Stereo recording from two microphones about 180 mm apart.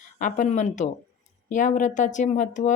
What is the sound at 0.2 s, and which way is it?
Speech, 45° left (ahead or behind).